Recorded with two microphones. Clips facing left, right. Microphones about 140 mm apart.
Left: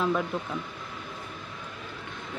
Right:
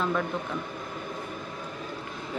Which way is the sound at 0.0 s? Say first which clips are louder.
Left 1 dB; 5° left (ahead or behind).